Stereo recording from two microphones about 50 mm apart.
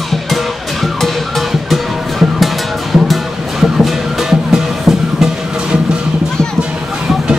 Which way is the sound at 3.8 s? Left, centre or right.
Centre.